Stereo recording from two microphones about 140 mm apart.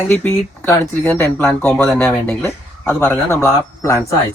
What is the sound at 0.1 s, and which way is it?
Speech, 15° left (ahead or behind).